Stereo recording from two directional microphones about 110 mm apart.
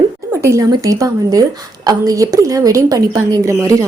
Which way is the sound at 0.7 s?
35° right (ahead or behind).